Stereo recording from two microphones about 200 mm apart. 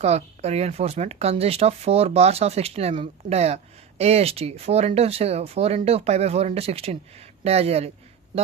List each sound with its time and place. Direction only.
0.0 s speech: 30° right (ahead or behind)